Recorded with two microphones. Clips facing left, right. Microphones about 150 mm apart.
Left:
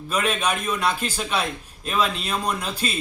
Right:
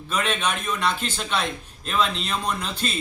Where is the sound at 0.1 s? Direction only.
10° left (ahead or behind).